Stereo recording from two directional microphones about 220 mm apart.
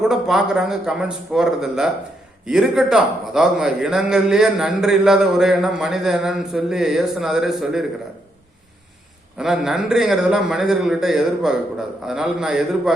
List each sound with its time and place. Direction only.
0.0 s a man's voice: centre (ahead or behind)
9.4 s a man's voice: centre (ahead or behind)